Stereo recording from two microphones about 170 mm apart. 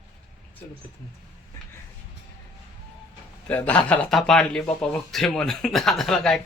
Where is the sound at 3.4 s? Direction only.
10° left (ahead or behind).